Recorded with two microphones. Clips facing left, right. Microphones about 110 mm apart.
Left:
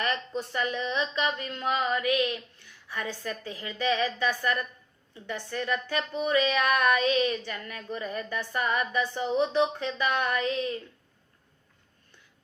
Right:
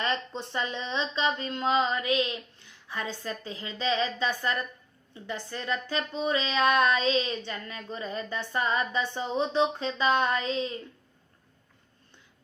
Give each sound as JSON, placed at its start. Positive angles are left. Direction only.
{"t": 0.0, "sound": "speech", "side_deg": -25}